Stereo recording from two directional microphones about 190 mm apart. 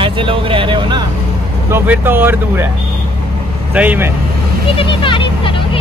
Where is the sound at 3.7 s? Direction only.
10° right (ahead or behind).